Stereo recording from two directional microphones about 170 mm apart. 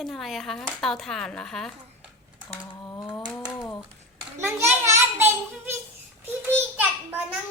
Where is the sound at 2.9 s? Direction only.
20° left (ahead or behind).